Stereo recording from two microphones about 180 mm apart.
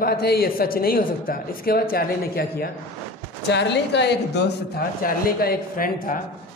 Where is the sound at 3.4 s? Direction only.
75° left (ahead or behind); by 6.2 s 50° left (ahead or behind).